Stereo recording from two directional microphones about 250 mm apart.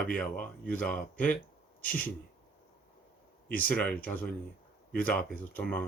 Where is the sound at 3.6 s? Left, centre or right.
Centre.